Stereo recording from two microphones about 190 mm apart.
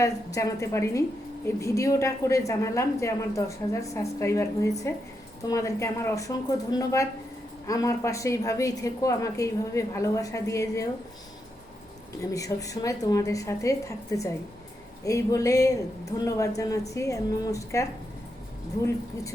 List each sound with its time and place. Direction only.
0.0 s a woman's voice: 15° left (ahead or behind)
12.3 s a woman's voice: 15° left (ahead or behind)